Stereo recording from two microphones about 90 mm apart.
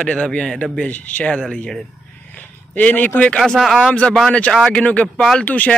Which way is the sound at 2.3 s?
20° left (ahead or behind).